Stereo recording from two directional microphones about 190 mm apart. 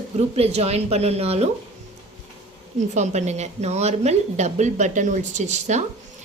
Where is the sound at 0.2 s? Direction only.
35° right (ahead or behind).